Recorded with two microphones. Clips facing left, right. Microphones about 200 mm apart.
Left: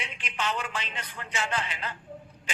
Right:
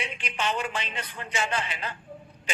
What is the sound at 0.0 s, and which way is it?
A man's voice, 15° right (ahead or behind).